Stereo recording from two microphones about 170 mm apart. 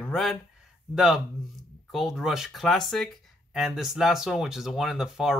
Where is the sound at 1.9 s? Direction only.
Centre (ahead or behind).